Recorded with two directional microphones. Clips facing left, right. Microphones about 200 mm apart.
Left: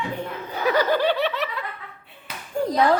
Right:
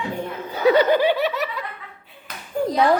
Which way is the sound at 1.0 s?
10° right (ahead or behind).